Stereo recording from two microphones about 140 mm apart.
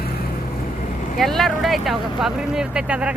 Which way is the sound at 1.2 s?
Centre (ahead or behind).